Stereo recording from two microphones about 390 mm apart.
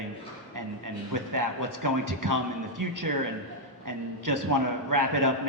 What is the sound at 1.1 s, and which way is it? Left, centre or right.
A man's voice, right.